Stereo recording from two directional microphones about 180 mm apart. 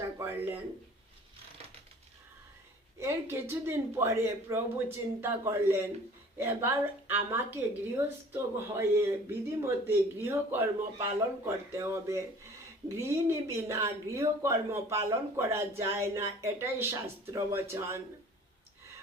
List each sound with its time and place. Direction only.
0.2 s speech: 10° right (ahead or behind)
3.0 s a woman's voice: 15° right (ahead or behind)